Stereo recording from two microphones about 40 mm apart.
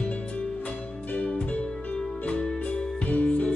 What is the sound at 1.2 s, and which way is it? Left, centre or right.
Music, left.